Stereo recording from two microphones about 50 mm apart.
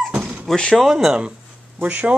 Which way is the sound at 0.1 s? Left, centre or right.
Right.